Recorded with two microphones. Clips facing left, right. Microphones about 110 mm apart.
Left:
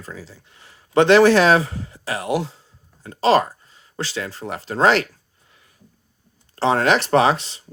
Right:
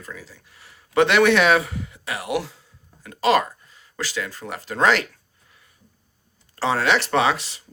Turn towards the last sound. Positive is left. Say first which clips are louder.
# left 4 dB
turn(degrees=30)  # may be behind; listen again after turning